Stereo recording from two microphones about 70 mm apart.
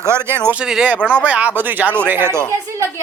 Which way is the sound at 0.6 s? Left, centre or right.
Centre.